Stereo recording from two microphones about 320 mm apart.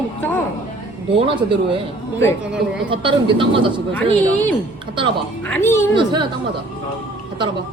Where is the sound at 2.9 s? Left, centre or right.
Centre.